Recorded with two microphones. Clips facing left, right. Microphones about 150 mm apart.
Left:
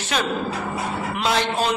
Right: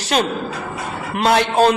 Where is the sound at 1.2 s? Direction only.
55° right (ahead or behind).